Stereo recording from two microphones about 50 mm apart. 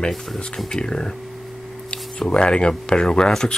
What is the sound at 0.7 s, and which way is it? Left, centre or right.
Speech, centre.